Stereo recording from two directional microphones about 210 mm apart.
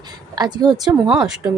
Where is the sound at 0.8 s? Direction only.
5° right (ahead or behind).